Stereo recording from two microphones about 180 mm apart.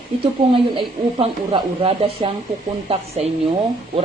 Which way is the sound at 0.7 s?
30° right (ahead or behind).